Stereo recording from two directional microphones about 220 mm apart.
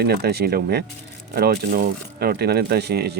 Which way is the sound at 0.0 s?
45° right (ahead or behind).